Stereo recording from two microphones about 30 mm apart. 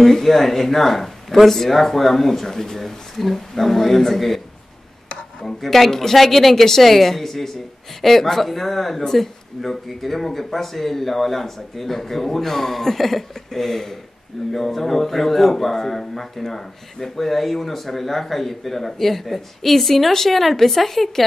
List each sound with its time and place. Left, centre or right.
0.2 s speech: centre
5.6 s speech: centre
6.5 s speech: centre